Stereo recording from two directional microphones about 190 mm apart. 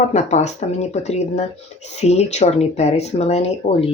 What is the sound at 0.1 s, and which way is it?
Speech, 35° left (ahead or behind).